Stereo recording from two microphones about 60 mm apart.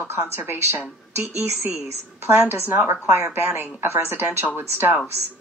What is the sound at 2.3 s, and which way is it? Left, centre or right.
Speech, right.